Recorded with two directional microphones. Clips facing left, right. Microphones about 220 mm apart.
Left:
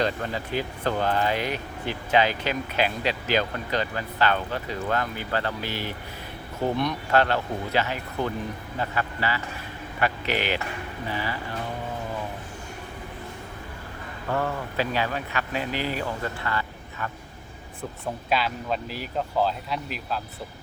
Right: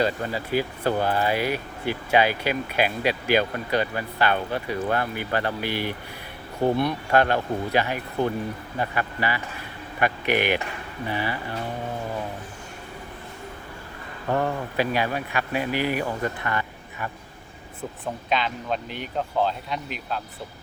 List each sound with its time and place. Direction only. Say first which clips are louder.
0.0 s speech: right 2 dB; 10° right (ahead or behind)
14.8 s speech: right 2 dB; 15° right (ahead or behind)
16.5 s vehicle: right 1 dB; 20° right (ahead or behind)
18.0 s speech: even; 5° left (ahead or behind)